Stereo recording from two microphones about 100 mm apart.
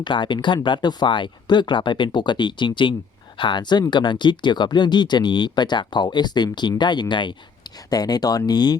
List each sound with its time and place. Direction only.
0.0 s speech: 50° left (ahead or behind)
7.9 s speech: 40° left (ahead or behind)